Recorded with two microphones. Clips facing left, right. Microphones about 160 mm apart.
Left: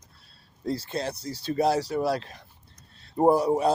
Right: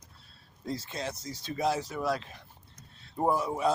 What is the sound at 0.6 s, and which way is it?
A man's voice, 35° left (ahead or behind).